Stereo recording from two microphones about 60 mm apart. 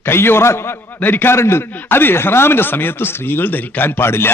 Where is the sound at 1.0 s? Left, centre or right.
Left.